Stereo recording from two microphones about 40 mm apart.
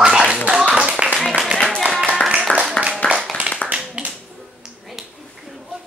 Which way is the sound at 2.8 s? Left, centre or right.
Left.